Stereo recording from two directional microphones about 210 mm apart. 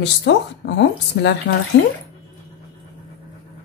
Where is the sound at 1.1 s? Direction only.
45° left (ahead or behind).